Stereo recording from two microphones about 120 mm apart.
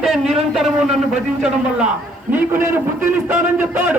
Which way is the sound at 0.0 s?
Centre (ahead or behind).